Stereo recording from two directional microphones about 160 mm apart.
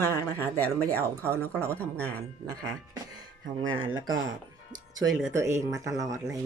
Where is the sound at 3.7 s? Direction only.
30° right (ahead or behind).